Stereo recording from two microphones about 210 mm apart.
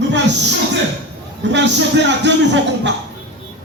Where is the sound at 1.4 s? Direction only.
55° right (ahead or behind).